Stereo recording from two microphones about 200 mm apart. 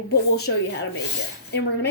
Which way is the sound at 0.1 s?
55° left (ahead or behind).